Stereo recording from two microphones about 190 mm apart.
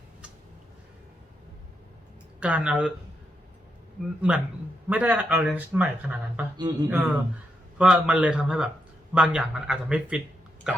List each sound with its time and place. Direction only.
2.4 s speech: 5° right (ahead or behind)
4.9 s speech: 10° right (ahead or behind)
6.6 s speech: 20° right (ahead or behind)
6.8 s a man's voice: 10° right (ahead or behind)